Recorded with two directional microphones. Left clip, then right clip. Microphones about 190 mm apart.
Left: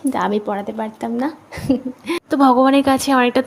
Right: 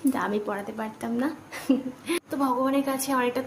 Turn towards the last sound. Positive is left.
turn(degrees=35)  # may be behind; listen again after turning